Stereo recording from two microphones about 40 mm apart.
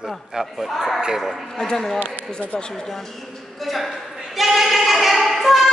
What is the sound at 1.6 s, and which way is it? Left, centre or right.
Speech, centre.